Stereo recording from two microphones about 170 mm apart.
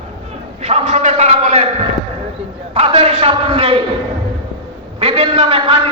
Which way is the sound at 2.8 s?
35° right (ahead or behind).